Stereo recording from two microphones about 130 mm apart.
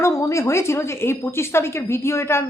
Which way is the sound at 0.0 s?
25° left (ahead or behind).